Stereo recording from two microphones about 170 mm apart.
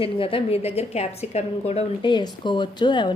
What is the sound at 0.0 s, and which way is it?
A woman's voice, 30° left (ahead or behind).